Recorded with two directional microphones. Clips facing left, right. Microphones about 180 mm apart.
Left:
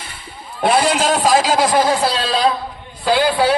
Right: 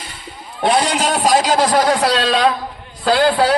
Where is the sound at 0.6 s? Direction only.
Centre (ahead or behind).